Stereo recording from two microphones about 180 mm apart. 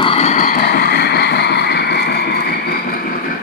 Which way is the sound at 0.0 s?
35° left (ahead or behind).